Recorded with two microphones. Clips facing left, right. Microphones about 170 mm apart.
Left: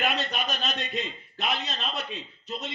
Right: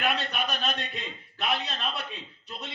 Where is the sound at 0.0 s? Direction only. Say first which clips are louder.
Even; 55° right (ahead or behind).